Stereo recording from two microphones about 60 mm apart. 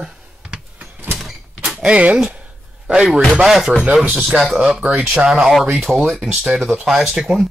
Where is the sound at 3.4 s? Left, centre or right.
Centre.